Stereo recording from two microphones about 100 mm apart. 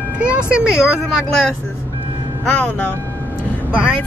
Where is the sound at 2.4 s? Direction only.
15° left (ahead or behind).